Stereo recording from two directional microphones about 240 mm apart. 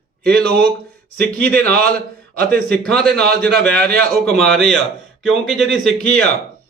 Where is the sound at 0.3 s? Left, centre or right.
Centre.